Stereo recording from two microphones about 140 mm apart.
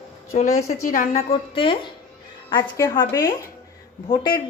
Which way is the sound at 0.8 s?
70° left (ahead or behind).